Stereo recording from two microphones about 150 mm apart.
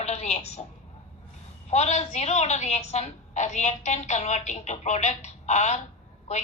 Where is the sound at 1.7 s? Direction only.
50° left (ahead or behind).